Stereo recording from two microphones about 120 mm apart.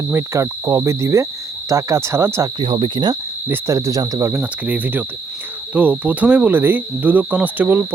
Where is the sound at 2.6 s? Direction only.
45° right (ahead or behind).